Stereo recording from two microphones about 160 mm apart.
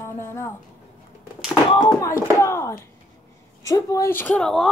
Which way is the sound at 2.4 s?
15° left (ahead or behind).